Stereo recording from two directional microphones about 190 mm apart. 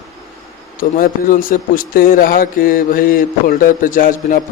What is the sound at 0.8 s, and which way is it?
A man's voice, 50° left (ahead or behind).